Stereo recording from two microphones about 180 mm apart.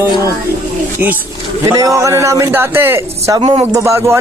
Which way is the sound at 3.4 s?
35° right (ahead or behind).